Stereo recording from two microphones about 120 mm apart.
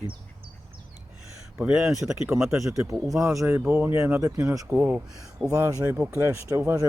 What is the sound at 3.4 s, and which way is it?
Speech, 10° right (ahead or behind).